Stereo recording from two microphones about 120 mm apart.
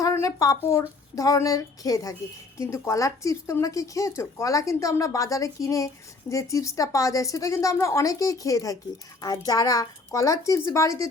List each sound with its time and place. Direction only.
0.0 s speech: 25° left (ahead or behind)